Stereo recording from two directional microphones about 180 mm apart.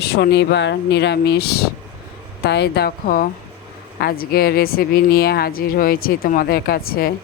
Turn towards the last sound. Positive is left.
turn(degrees=55)  # may be behind; listen again after turning